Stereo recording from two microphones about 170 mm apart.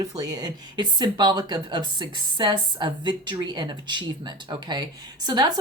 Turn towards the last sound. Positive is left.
turn(degrees=-25)  # may be behind; listen again after turning